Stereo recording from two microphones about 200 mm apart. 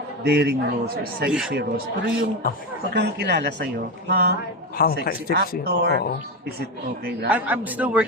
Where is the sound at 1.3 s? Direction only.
5° right (ahead or behind).